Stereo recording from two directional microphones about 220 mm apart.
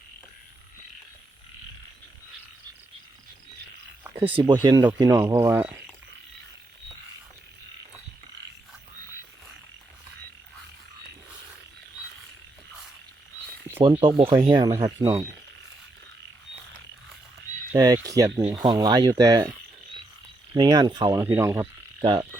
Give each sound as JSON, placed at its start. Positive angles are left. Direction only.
{"t": 4.4, "sound": "speech", "side_deg": -20}
{"t": 13.8, "sound": "speech", "side_deg": -25}
{"t": 17.7, "sound": "speech", "side_deg": -15}
{"t": 20.6, "sound": "speech", "side_deg": -20}